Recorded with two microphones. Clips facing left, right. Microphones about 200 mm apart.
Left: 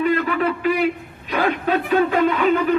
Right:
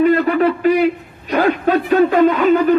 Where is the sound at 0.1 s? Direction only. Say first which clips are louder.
Right 6 dB; 40° right (ahead or behind).